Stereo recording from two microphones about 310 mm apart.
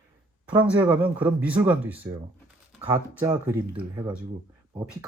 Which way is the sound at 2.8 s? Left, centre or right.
Centre.